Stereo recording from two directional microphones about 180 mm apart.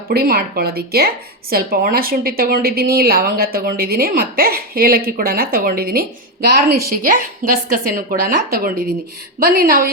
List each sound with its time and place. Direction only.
0.1 s speech: 60° right (ahead or behind)